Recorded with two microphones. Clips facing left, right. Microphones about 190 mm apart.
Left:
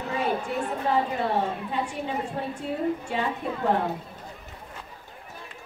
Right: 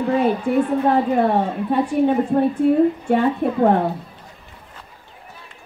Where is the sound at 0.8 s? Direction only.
55° right (ahead or behind).